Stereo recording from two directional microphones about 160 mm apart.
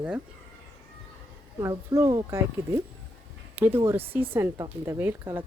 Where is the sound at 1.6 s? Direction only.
20° right (ahead or behind).